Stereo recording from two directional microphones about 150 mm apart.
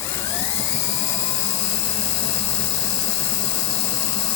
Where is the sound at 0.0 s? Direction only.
20° left (ahead or behind).